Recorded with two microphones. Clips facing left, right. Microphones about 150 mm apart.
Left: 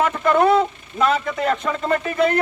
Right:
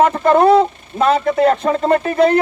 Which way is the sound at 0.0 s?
35° right (ahead or behind).